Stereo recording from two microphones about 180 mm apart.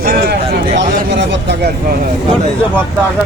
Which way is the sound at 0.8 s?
80° right.